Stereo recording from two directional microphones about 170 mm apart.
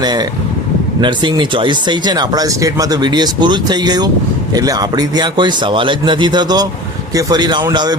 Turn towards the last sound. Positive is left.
turn(degrees=-25)  # may be behind; listen again after turning